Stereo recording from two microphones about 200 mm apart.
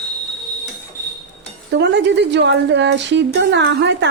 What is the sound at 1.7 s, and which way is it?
A woman's voice, 60° right (ahead or behind).